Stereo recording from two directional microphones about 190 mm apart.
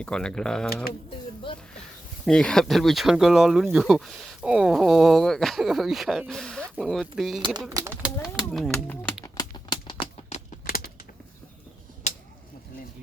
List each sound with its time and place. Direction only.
0.0 s speech: 5° left (ahead or behind)
2.2 s speech: 5° left (ahead or behind)
7.7 s speech: 20° right (ahead or behind)
8.4 s speech: centre (ahead or behind)
9.2 s a sound: 20° left (ahead or behind)
12.1 s a sound: 40° left (ahead or behind)